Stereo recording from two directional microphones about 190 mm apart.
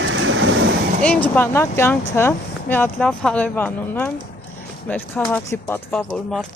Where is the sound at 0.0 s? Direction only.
85° right.